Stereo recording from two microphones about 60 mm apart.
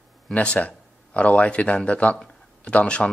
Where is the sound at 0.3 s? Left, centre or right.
Left.